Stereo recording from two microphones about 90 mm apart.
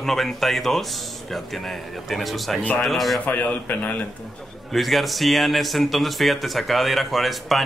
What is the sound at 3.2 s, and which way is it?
Speech, 15° left (ahead or behind).